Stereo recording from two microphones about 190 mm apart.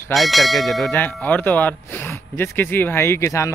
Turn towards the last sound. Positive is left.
turn(degrees=15)  # may be behind; listen again after turning